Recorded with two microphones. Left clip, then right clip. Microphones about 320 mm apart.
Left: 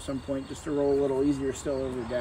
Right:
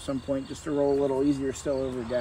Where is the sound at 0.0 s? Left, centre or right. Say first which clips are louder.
Right 3 dB; centre.